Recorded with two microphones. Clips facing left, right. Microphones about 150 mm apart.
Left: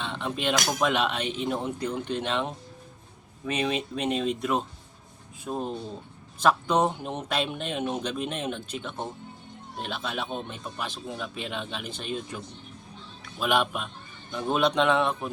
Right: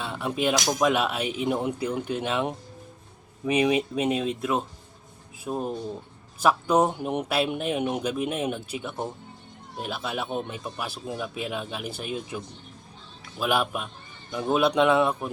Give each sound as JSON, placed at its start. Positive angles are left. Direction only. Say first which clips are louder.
{"t": 0.0, "sound": "a sound", "louder": "right 3 dB", "side_deg": -10}
{"t": 0.8, "sound": "speech", "louder": "right 2 dB", "side_deg": -10}
{"t": 13.4, "sound": "a man's voice", "louder": "even", "side_deg": -5}